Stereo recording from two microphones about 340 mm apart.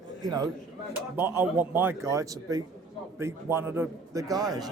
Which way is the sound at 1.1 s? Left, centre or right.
Centre.